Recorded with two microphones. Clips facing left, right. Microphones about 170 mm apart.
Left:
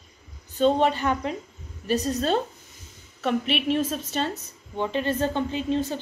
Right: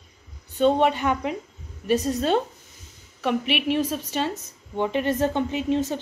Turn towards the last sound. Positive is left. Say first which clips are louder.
# right 2 dB
turn(degrees=-20)  # may be behind; listen again after turning